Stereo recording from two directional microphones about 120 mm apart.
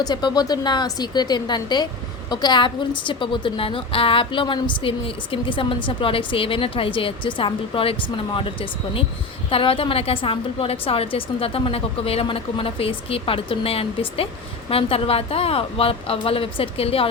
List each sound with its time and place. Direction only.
0.0 s a woman's voice: 35° left (ahead or behind); by 17.1 s 55° left (ahead or behind)